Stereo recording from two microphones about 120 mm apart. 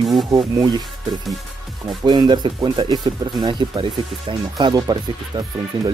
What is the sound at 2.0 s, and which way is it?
Speech, 40° right (ahead or behind).